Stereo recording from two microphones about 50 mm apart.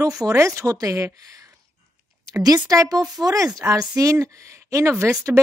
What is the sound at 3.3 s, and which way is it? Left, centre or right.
Speech, right.